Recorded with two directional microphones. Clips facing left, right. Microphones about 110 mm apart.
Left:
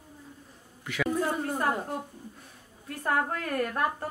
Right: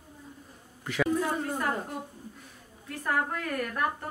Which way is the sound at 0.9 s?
40° right (ahead or behind).